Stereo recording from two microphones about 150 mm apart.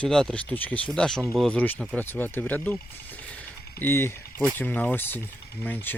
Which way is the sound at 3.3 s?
15° left (ahead or behind).